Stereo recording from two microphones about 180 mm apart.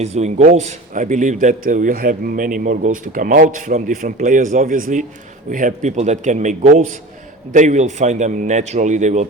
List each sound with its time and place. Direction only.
0.0 s a man's voice: 40° right (ahead or behind)